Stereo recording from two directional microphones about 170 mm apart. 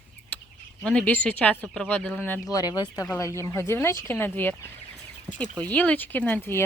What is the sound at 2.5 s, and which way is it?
Speech, 20° left (ahead or behind).